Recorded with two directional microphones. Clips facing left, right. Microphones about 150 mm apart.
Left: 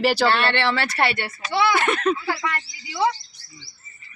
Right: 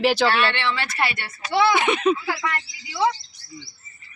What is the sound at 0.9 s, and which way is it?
Speech, 30° left (ahead or behind).